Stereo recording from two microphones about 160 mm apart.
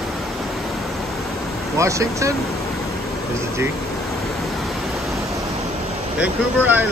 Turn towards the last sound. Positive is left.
turn(degrees=-10)  # may be behind; listen again after turning